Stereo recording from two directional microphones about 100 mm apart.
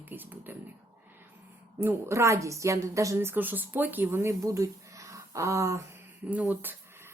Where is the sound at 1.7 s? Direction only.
25° right (ahead or behind).